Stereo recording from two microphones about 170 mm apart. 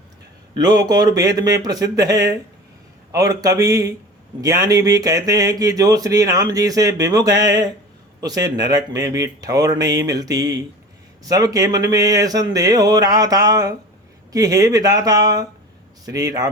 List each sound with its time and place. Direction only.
0.5 s speech: 20° right (ahead or behind)